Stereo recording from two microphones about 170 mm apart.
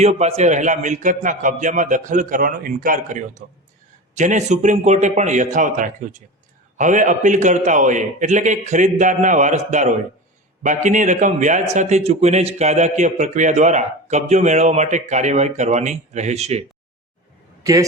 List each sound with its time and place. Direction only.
0.0 s speech: 40° right (ahead or behind)
17.6 s a man's voice: 20° right (ahead or behind)